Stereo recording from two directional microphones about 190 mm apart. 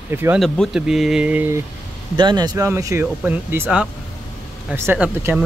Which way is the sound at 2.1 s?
25° right (ahead or behind).